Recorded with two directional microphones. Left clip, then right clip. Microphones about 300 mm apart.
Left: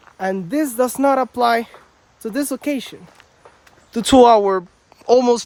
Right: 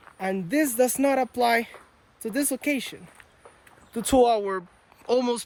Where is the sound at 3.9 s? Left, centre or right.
Left.